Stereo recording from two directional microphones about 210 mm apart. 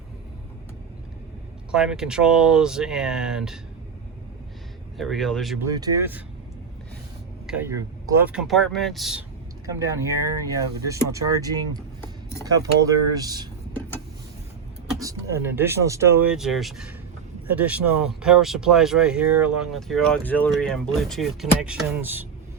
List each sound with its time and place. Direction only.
1.7 s speech: 5° right (ahead or behind)
4.9 s speech: centre (ahead or behind)
5.6 s speech: 15° right (ahead or behind)
7.4 s speech: 10° right (ahead or behind)
9.6 s speech: 15° right (ahead or behind)
14.9 s speech: 15° right (ahead or behind)